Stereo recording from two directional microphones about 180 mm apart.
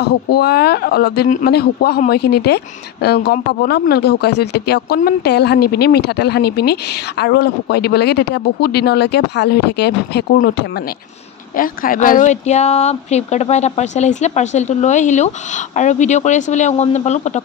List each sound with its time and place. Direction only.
0.0 s speech: 60° left (ahead or behind)
11.5 s speech: 50° left (ahead or behind)